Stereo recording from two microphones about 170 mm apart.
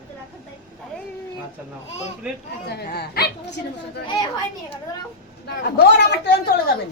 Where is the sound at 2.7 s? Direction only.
70° left (ahead or behind).